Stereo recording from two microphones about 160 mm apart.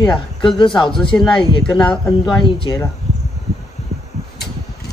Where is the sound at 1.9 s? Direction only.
30° left (ahead or behind).